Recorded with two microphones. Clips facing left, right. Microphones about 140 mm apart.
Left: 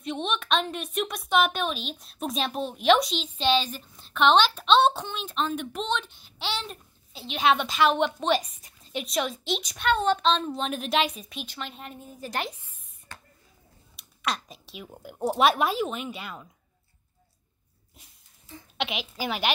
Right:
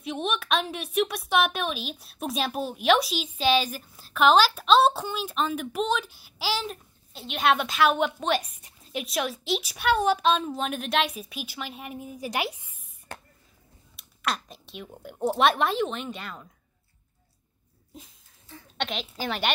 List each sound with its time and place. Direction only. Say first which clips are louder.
0.0 s a woman's voice: even; 5° right (ahead or behind)
13.9 s a woman's voice: even; centre (ahead or behind)
18.8 s a woman's voice: left 1 dB; 5° left (ahead or behind)